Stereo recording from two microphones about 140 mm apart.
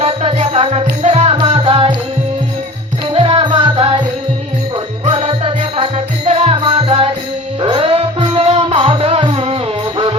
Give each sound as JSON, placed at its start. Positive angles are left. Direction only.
{"t": 0.0, "sound": "music", "side_deg": -50}
{"t": 3.1, "sound": "music", "side_deg": -40}
{"t": 5.0, "sound": "music", "side_deg": -50}
{"t": 6.6, "sound": "music", "side_deg": -40}